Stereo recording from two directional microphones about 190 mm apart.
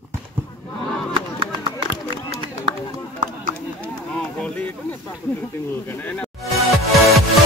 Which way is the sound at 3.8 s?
5° left (ahead or behind).